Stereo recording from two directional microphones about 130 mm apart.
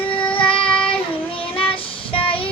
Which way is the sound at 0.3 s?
45° left (ahead or behind).